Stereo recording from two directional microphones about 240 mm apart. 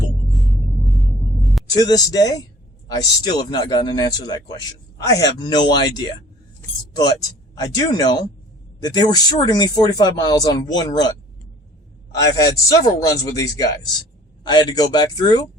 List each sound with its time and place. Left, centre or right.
1.7 s speech: centre
12.1 s speech: centre